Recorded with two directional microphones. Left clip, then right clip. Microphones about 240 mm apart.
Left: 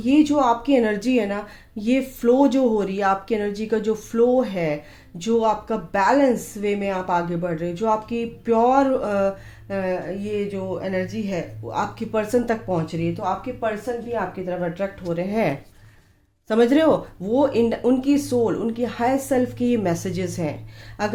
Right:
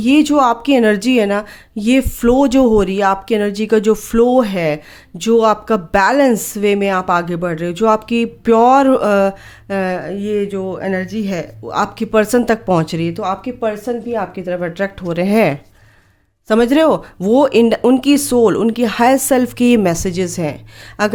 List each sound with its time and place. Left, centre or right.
0.0 s speech: right